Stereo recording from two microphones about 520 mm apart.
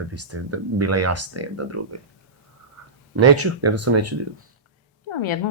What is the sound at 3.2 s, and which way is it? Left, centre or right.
Speech, right.